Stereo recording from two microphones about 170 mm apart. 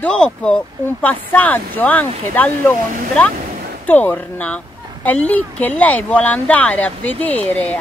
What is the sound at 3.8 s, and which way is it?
Speech, 10° left (ahead or behind).